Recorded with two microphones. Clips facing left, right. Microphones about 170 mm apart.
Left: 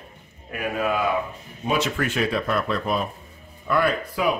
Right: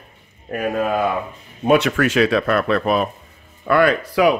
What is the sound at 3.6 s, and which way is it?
Speech, 80° right.